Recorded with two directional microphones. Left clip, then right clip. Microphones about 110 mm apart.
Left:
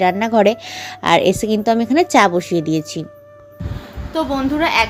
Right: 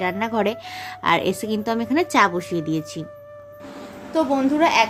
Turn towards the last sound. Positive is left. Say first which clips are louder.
# left 1 dB
turn(degrees=-10)  # may be behind; listen again after turning